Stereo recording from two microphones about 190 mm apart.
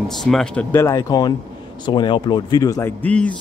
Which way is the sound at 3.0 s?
5° left (ahead or behind).